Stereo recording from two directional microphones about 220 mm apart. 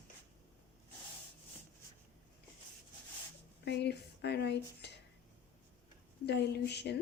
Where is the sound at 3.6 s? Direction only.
50° left (ahead or behind).